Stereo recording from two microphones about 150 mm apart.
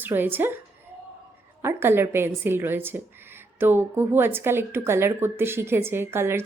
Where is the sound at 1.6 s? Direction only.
15° right (ahead or behind).